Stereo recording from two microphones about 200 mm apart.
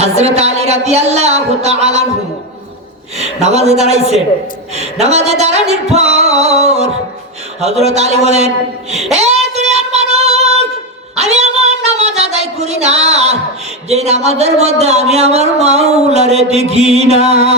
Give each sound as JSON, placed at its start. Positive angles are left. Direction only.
{"t": 0.0, "sound": "speech", "side_deg": -30}
{"t": 3.2, "sound": "speech", "side_deg": -35}
{"t": 9.1, "sound": "child singing", "side_deg": -35}
{"t": 11.1, "sound": "a sound", "side_deg": -35}
{"t": 13.8, "sound": "speech", "side_deg": -35}